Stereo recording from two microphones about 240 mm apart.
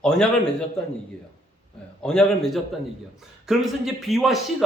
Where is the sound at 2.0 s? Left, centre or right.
Centre.